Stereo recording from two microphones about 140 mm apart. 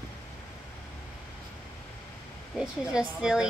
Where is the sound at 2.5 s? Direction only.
5° right (ahead or behind).